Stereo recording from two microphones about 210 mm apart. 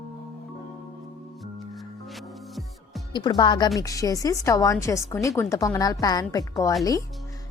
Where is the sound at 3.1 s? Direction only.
20° left (ahead or behind).